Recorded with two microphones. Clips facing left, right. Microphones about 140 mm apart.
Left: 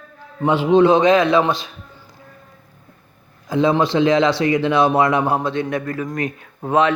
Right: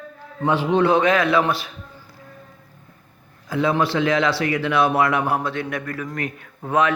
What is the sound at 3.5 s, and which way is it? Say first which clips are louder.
Speech: left 4 dB; 25° left (ahead or behind).